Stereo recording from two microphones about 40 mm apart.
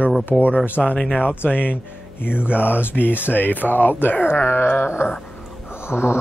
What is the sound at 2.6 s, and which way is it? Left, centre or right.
Speech, left.